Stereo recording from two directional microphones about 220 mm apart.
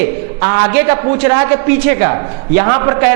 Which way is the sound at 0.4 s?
15° right (ahead or behind).